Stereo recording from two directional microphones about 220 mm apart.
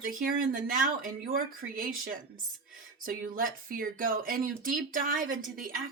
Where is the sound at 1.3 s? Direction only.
40° right (ahead or behind).